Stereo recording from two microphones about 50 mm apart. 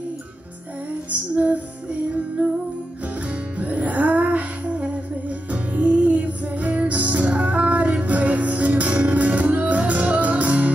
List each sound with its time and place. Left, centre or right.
1.3 s music: right